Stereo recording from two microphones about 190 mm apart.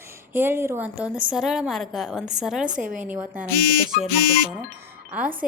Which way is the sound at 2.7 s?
40° right (ahead or behind).